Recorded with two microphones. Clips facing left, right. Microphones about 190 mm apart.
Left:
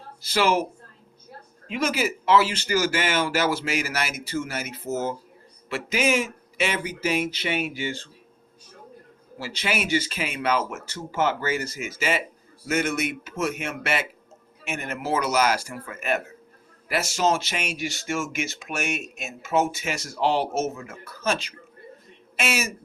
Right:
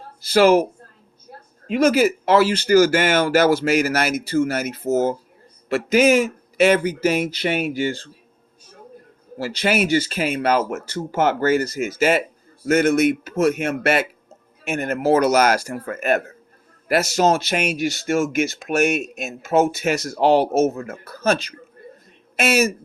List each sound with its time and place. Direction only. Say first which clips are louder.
0.3 s speech: right 8 dB; 50° right (ahead or behind)
1.6 s speech: right 9 dB; 40° right (ahead or behind)
9.4 s speech: right 8 dB; 40° right (ahead or behind)
16.9 s speech: right 8 dB; 40° right (ahead or behind)
17.2 s speech: right 5 dB; 60° right (ahead or behind)
18.1 s speech: right 9 dB; 40° right (ahead or behind)
19.6 s speech: right 8 dB; 60° right (ahead or behind)
20.1 s speech: right 7 dB; 50° right (ahead or behind)